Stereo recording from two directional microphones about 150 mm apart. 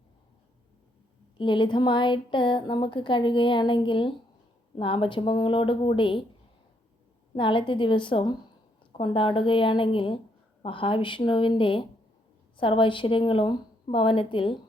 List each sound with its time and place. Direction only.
1.4 s speech: 35° left (ahead or behind)
7.3 s speech: 35° left (ahead or behind)